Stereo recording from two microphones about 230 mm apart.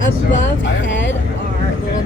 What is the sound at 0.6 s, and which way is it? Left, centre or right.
Speech, left.